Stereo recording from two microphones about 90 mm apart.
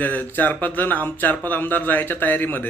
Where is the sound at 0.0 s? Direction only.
20° left (ahead or behind).